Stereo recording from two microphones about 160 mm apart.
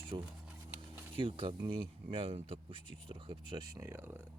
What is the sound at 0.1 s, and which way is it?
Speech, 35° right (ahead or behind).